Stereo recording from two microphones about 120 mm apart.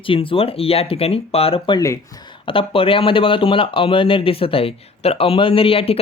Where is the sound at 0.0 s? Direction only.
50° left (ahead or behind).